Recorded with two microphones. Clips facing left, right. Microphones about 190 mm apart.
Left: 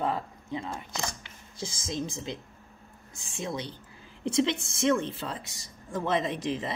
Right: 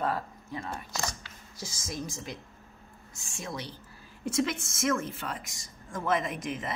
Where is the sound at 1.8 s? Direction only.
25° left (ahead or behind).